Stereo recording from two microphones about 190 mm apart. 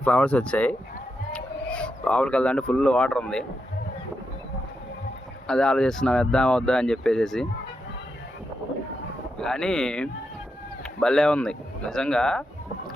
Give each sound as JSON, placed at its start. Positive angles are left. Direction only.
{"t": 0.0, "sound": "speech", "side_deg": 5}
{"t": 5.5, "sound": "speech", "side_deg": 5}
{"t": 9.4, "sound": "speech", "side_deg": 5}